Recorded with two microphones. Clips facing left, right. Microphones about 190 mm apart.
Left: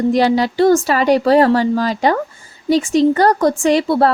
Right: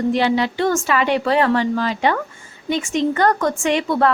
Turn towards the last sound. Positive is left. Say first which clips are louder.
# left 5 dB
turn(degrees=35)  # may be behind; listen again after turning